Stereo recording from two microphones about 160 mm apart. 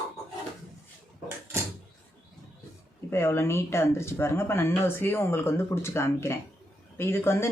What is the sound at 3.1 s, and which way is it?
Speech, 15° left (ahead or behind).